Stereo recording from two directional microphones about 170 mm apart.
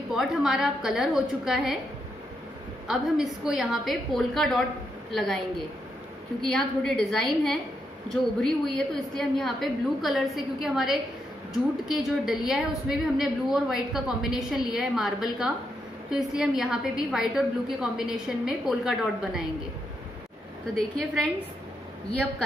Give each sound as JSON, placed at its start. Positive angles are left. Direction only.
{"t": 0.1, "sound": "a woman's voice", "side_deg": 0}
{"t": 2.9, "sound": "a woman's voice", "side_deg": 0}
{"t": 6.4, "sound": "a woman's voice", "side_deg": 5}
{"t": 21.0, "sound": "a woman's voice", "side_deg": 0}